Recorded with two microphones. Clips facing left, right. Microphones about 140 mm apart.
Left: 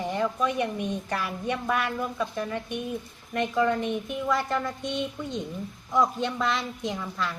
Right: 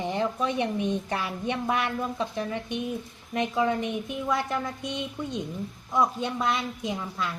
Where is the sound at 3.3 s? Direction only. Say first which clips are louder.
Left 1 dB; 15° right (ahead or behind).